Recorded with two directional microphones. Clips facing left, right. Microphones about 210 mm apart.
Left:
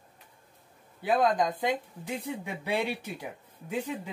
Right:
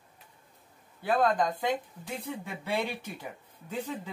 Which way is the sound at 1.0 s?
15° left (ahead or behind).